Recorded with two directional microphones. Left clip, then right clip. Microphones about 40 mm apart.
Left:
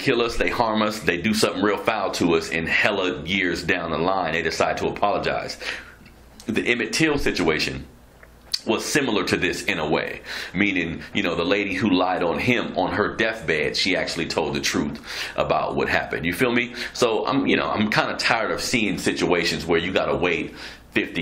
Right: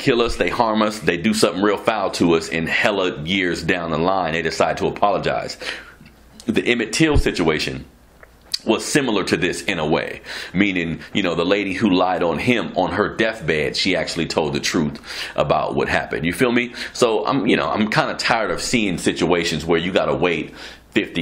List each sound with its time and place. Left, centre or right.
0.0 s a man's voice: right
18.6 s a man's voice: right